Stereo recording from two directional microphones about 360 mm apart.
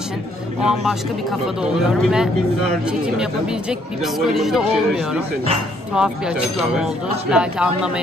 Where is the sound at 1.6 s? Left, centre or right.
Centre.